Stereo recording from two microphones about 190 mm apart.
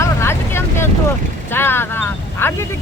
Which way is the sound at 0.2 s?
15° left (ahead or behind).